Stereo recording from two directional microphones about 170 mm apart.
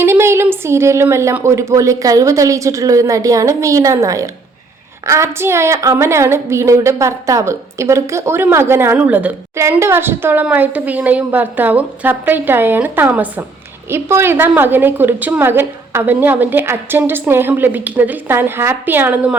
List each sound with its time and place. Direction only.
0.0 s a woman's voice: 15° right (ahead or behind)